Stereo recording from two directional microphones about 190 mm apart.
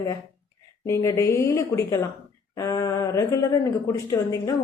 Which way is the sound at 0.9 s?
15° left (ahead or behind).